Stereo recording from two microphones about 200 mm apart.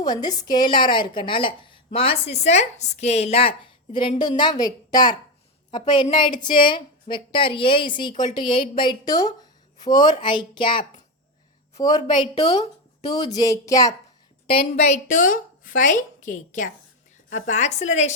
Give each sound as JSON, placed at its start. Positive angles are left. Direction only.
{"t": 0.0, "sound": "a woman's voice", "side_deg": 20}
{"t": 14.4, "sound": "a woman's voice", "side_deg": 30}